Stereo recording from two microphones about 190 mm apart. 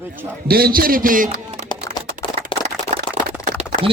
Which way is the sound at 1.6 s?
20° left (ahead or behind).